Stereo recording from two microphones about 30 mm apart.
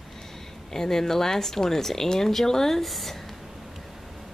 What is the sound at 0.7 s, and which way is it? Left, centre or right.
Speech, centre.